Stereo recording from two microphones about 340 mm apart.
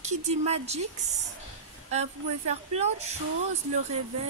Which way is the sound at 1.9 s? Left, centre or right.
Centre.